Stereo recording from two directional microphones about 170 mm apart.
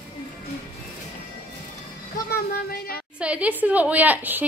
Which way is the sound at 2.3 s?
60° left (ahead or behind).